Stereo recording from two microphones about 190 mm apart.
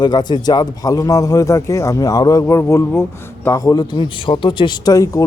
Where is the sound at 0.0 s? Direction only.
20° left (ahead or behind).